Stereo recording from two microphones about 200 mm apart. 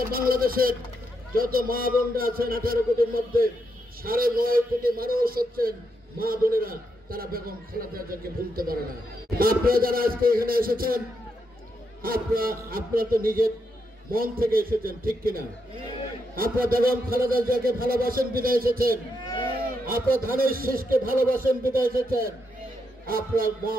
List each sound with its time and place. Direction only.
0.1 s a man's voice: 45° right (ahead or behind)
12.0 s a man's voice: 45° right (ahead or behind)